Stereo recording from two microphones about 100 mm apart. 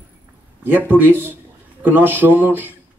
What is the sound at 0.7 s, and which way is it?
Speech, 20° right (ahead or behind).